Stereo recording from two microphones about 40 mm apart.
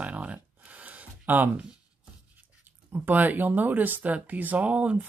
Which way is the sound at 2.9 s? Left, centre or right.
Right.